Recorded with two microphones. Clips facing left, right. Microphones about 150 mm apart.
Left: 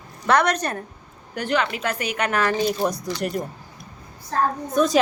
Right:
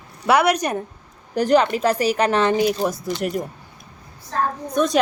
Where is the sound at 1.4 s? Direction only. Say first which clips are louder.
Right 7 dB; 35° right (ahead or behind).